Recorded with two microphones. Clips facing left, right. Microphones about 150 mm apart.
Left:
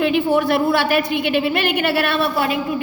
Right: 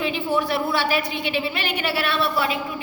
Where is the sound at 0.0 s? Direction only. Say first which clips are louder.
Left 7 dB; 55° left (ahead or behind).